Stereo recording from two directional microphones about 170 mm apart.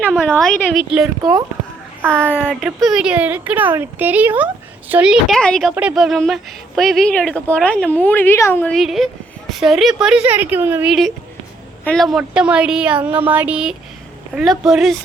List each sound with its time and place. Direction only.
0.0 s a woman's voice: 5° left (ahead or behind)
1.2 s speech: 20° right (ahead or behind)
2.0 s a woman's voice: 5° left (ahead or behind)
8.7 s a woman's voice: centre (ahead or behind)
11.9 s a woman's voice: centre (ahead or behind)